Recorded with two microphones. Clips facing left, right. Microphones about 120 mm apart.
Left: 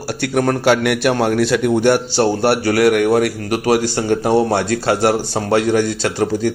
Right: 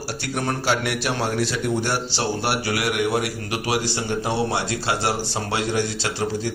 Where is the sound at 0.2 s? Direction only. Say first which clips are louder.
Left 10 dB; 60° left (ahead or behind).